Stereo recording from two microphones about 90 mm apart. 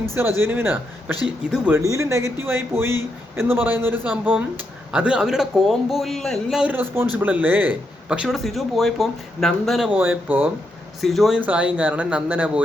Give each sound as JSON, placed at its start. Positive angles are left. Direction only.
{"t": 0.0, "sound": "a man's voice", "side_deg": -30}
{"t": 1.8, "sound": "a man's voice", "side_deg": -35}
{"t": 6.6, "sound": "a man's voice", "side_deg": -20}
{"t": 8.4, "sound": "speech", "side_deg": 0}
{"t": 9.9, "sound": "a man's voice", "side_deg": -20}
{"t": 11.0, "sound": "speech", "side_deg": 0}
{"t": 11.3, "sound": "speech", "side_deg": -15}